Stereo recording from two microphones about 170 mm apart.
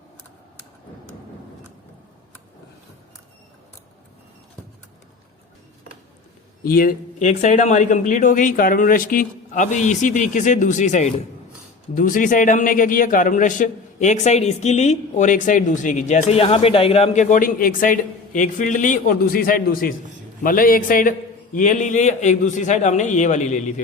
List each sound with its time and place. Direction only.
6.7 s a man's voice: 55° left (ahead or behind)